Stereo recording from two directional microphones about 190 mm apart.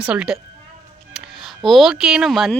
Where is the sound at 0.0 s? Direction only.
5° right (ahead or behind).